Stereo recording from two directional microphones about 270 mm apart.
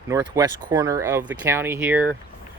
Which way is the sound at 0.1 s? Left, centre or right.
Centre.